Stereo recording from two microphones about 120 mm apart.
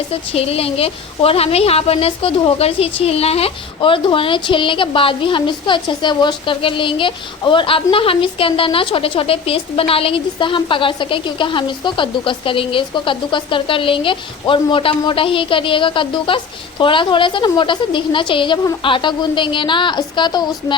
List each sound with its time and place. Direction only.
0.1 s a woman's voice: 55° left (ahead or behind); by 20.7 s 40° left (ahead or behind)